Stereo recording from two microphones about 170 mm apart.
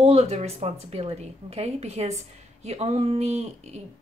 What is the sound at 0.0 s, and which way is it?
Speech, 40° right (ahead or behind).